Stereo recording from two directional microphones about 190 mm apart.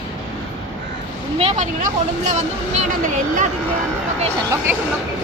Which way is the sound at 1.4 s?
35° right (ahead or behind).